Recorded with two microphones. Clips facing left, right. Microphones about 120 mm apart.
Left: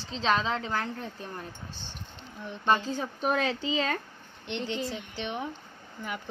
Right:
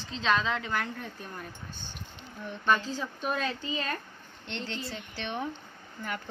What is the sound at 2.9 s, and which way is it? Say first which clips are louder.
Speech: left 4 dB; 55° left (ahead or behind).